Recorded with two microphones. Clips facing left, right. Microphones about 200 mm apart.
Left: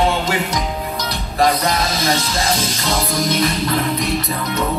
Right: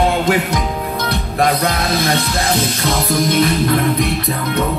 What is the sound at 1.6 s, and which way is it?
Music, 60° right (ahead or behind).